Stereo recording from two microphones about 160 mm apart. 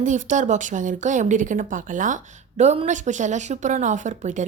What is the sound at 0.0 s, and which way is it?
Speech, 50° right (ahead or behind).